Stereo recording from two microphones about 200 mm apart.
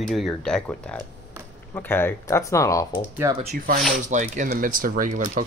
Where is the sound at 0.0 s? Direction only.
Centre (ahead or behind).